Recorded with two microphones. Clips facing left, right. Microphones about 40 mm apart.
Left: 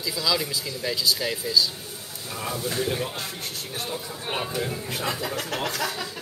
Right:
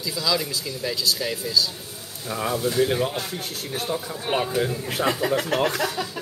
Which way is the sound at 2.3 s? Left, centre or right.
Right.